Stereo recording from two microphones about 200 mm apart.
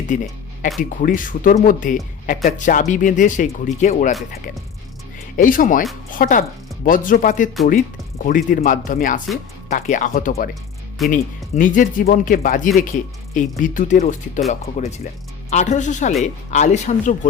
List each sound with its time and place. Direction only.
0.1 s speech: 40° left (ahead or behind)
5.4 s speech: 40° left (ahead or behind)
10.5 s music: centre (ahead or behind)
11.1 s speech: 40° left (ahead or behind)